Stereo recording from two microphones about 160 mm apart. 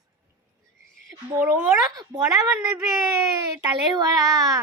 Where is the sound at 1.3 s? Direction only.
10° right (ahead or behind).